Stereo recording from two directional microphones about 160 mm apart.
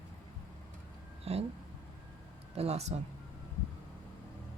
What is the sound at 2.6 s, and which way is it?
Speech, 40° right (ahead or behind).